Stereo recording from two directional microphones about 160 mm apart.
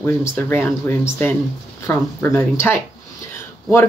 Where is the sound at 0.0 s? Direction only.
15° left (ahead or behind).